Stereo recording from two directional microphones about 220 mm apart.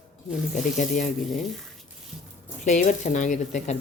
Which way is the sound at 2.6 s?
35° left (ahead or behind).